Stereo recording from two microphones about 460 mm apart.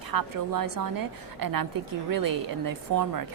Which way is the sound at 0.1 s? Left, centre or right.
Right.